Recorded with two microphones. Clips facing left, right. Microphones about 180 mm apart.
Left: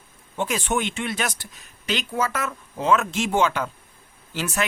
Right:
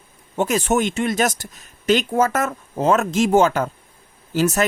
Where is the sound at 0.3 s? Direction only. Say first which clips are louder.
Right 6 dB; 45° right (ahead or behind).